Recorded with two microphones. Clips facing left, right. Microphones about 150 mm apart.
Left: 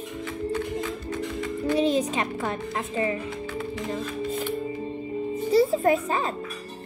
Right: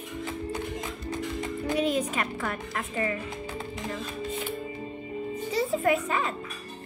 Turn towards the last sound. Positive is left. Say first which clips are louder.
# left 3 dB
turn(degrees=35)  # may be behind; listen again after turning